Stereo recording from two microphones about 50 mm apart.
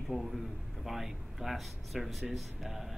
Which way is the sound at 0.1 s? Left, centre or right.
Centre.